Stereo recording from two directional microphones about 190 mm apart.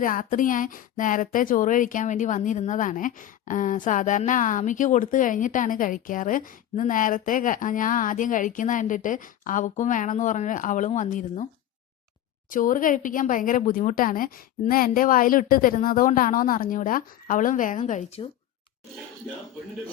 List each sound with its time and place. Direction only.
0.0 s speech: 45° left (ahead or behind)
12.5 s speech: 45° left (ahead or behind)